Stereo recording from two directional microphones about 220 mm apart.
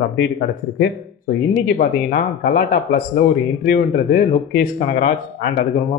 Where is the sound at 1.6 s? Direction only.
40° left (ahead or behind).